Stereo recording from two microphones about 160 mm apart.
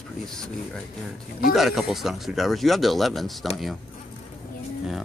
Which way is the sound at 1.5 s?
Centre (ahead or behind).